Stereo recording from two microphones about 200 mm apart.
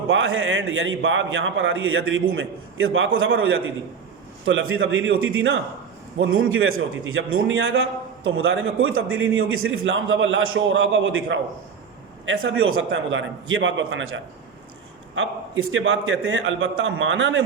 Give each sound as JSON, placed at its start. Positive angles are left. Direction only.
{"t": 0.1, "sound": "a man's voice", "side_deg": -75}